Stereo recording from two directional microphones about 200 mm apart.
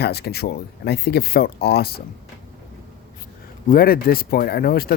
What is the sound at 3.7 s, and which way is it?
Speech, 50° left (ahead or behind).